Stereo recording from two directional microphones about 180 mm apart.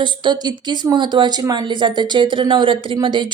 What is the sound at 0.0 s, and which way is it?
A woman's voice, 25° right (ahead or behind).